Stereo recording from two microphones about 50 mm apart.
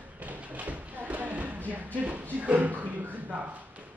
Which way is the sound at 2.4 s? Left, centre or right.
Right.